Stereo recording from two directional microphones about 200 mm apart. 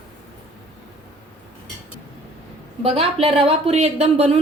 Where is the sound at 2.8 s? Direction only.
30° right (ahead or behind).